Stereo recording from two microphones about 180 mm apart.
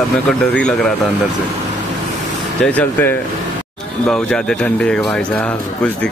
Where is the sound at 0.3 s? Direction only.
5° left (ahead or behind).